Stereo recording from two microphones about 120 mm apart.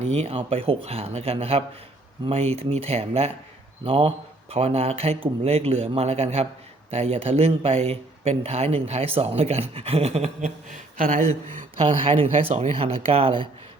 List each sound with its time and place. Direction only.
0.0 s speech: 60° right (ahead or behind); by 11.6 s 90° right
11.8 s speech: 50° right (ahead or behind)